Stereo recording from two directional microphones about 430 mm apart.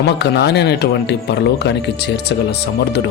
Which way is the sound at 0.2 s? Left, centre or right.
Left.